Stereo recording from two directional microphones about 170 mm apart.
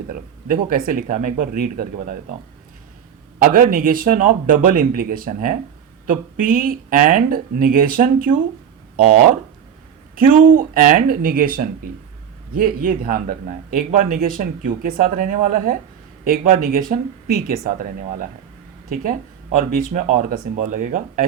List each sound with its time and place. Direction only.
0.9 s speech: 50° right (ahead or behind)
3.3 s speech: 55° right (ahead or behind)
10.2 s speech: 55° right (ahead or behind)